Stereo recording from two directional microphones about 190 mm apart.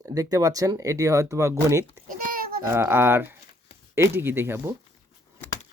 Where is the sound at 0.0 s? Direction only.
20° right (ahead or behind).